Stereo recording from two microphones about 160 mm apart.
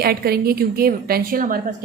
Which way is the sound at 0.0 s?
70° right (ahead or behind).